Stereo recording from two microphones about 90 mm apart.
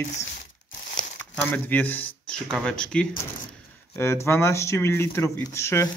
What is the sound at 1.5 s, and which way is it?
Speech, 20° left (ahead or behind).